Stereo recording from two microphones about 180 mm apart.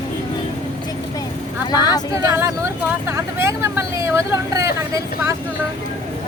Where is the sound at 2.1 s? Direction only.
15° right (ahead or behind).